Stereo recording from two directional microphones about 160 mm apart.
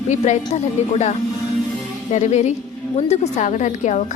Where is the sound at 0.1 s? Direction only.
45° left (ahead or behind).